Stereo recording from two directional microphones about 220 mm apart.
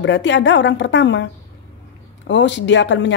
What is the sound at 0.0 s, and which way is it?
A woman's voice, 55° left (ahead or behind).